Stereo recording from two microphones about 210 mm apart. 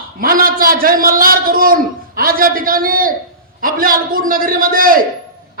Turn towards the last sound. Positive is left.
turn(degrees=-45)  # may be behind; listen again after turning